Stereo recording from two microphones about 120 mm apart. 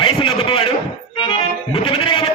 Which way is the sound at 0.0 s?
45° left (ahead or behind).